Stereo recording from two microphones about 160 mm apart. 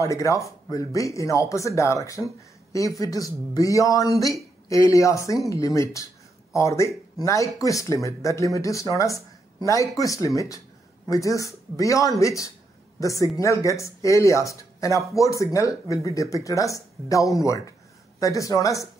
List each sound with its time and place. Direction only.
0.0 s speech: 20° left (ahead or behind)